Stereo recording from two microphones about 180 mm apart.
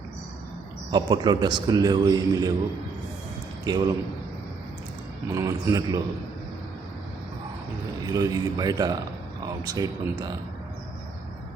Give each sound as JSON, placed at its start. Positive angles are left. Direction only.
{"t": 0.9, "sound": "a man's voice", "side_deg": -25}
{"t": 3.6, "sound": "speech", "side_deg": -20}
{"t": 5.3, "sound": "a man's voice", "side_deg": -15}
{"t": 8.0, "sound": "a man's voice", "side_deg": -20}